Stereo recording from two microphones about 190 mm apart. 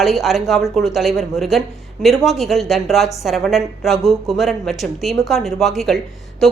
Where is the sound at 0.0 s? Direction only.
Centre (ahead or behind).